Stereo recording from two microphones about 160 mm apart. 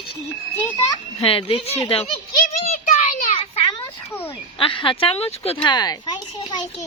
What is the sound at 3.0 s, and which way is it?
Child singing, 50° left (ahead or behind).